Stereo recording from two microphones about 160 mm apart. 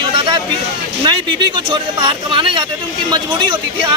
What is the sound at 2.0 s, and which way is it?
Speech, 30° right (ahead or behind).